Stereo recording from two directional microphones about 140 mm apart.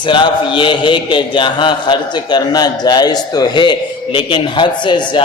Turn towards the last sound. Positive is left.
turn(degrees=35)  # may be behind; listen again after turning